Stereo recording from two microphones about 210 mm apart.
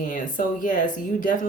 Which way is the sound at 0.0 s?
40° left (ahead or behind).